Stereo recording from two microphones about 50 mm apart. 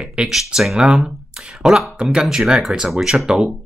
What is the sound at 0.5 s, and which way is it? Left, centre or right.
Speech, centre.